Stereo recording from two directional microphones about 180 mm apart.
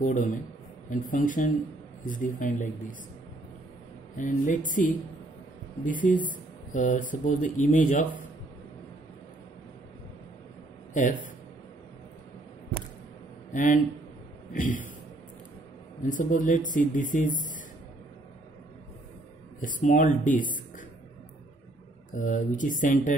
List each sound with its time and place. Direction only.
0.0 s speech: 45° left (ahead or behind)
4.2 s speech: 45° left (ahead or behind)
10.9 s speech: 45° left (ahead or behind)
13.5 s speech: 45° left (ahead or behind)
16.0 s speech: 45° left (ahead or behind)
19.6 s speech: 45° left (ahead or behind)
22.1 s speech: 45° left (ahead or behind)